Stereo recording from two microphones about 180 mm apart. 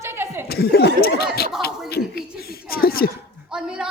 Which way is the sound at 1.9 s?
60° left (ahead or behind).